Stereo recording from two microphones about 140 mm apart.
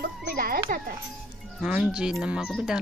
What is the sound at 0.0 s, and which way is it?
Music, 90° right.